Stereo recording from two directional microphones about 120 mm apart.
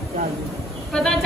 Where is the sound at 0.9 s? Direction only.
5° left (ahead or behind).